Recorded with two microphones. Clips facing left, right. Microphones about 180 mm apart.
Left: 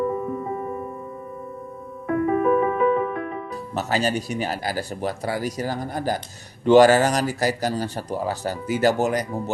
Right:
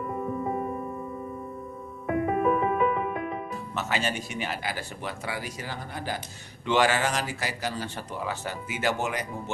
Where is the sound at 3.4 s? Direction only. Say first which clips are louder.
Left 5 dB; 35° left (ahead or behind).